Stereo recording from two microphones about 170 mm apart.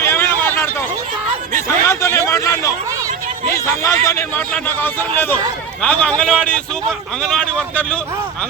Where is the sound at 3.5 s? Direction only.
15° left (ahead or behind).